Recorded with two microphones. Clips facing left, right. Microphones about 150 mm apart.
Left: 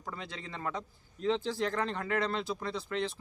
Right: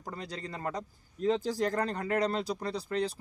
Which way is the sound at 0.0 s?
40° right (ahead or behind).